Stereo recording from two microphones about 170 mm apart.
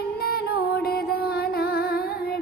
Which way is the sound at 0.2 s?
70° left (ahead or behind).